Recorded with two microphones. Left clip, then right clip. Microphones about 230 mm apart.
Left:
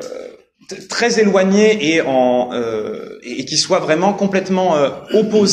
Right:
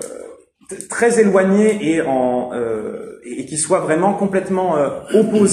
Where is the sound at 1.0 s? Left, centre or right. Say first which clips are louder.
Even; left.